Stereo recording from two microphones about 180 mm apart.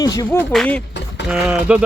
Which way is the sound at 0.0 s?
20° left (ahead or behind).